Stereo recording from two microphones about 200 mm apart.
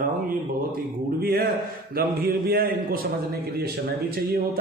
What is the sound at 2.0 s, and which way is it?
A man's voice, 50° right (ahead or behind).